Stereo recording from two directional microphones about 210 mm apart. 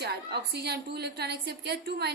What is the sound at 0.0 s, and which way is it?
A woman's voice, 50° right (ahead or behind).